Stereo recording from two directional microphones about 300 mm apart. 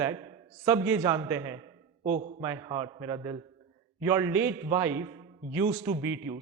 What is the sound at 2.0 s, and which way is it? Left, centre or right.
Speech, right.